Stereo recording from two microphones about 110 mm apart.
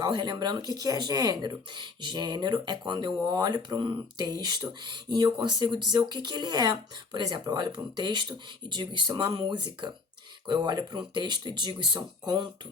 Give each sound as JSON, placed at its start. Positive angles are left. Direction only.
{"t": 0.0, "sound": "speech", "side_deg": -40}